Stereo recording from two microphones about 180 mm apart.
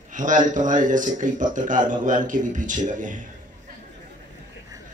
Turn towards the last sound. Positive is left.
turn(degrees=-45)  # may be behind; listen again after turning